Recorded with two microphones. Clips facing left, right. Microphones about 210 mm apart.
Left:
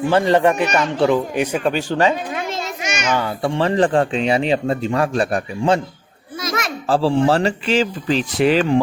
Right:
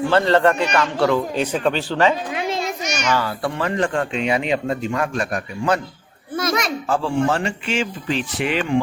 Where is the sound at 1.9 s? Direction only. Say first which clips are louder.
Left 1 dB; 45° left (ahead or behind).